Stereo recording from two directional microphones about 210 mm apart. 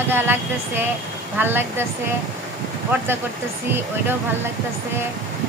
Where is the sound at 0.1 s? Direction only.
10° right (ahead or behind).